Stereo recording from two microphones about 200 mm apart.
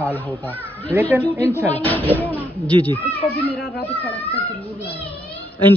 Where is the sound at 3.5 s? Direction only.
55° left (ahead or behind).